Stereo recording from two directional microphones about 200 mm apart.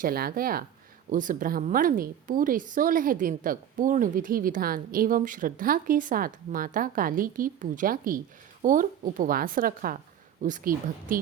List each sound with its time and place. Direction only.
0.0 s a woman's voice: 50° right (ahead or behind)